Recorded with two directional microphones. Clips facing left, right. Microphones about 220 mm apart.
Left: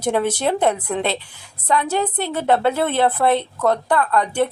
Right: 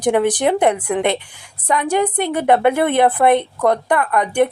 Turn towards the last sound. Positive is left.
turn(degrees=-15)  # may be behind; listen again after turning